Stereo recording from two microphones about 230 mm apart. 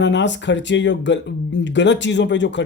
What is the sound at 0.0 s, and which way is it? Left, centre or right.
Speech, left.